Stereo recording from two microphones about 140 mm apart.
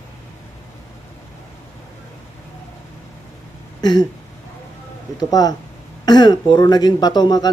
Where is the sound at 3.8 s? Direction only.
30° left (ahead or behind).